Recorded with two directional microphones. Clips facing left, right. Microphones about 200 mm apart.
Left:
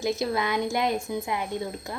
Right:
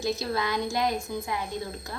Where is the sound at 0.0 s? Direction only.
20° left (ahead or behind).